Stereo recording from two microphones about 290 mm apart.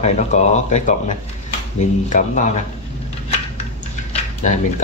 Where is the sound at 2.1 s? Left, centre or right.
Left.